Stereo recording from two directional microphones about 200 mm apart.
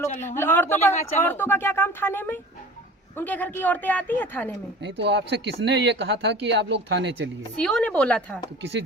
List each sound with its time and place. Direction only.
0.0 s a woman's voice: 10° left (ahead or behind)
4.8 s speech: 60° right (ahead or behind)
7.5 s a woman's voice: 5° left (ahead or behind)